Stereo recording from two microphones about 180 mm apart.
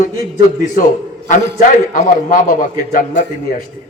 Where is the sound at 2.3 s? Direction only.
50° left (ahead or behind).